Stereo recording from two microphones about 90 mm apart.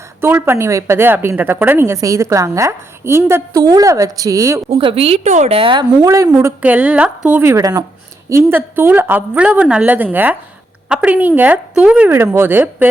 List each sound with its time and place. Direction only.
0.2 s a woman's voice: 25° right (ahead or behind)
3.6 s a woman's voice: 40° right (ahead or behind)
4.8 s a woman's voice: 80° right
6.1 s a woman's voice: 35° right (ahead or behind)
6.6 s a woman's voice: 15° right (ahead or behind)
7.5 s speech: 45° right (ahead or behind)
8.3 s a woman's voice: 30° right (ahead or behind); by 12.1 s 15° right (ahead or behind)
12.1 s a woman's voice: 25° right (ahead or behind)